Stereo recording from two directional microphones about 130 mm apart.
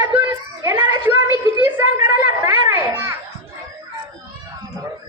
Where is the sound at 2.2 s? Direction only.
15° right (ahead or behind).